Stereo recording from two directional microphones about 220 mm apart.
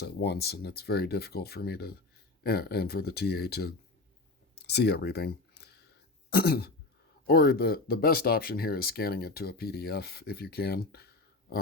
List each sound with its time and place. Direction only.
0.0 s speech: 45° left (ahead or behind)